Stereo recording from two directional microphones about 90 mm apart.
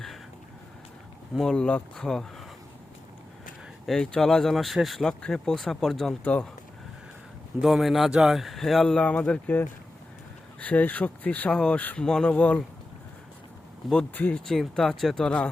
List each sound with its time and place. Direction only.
1.4 s speech: 10° left (ahead or behind)
3.8 s speech: 5° left (ahead or behind)
6.2 s speech: 15° left (ahead or behind)
7.6 s speech: 5° right (ahead or behind); by 9.6 s 15° left (ahead or behind)
10.6 s speech: 15° left (ahead or behind)
14.1 s speech: 20° left (ahead or behind)
14.4 s speech: 5° left (ahead or behind)